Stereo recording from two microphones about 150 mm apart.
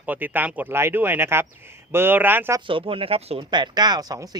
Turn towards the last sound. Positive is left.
turn(degrees=-25)  # may be behind; listen again after turning